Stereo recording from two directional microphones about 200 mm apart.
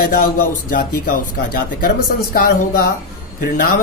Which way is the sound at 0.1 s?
45° left (ahead or behind).